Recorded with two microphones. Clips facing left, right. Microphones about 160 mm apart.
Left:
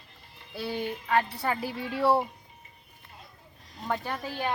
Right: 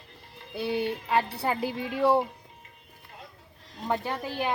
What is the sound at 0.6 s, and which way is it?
Speech, 20° right (ahead or behind).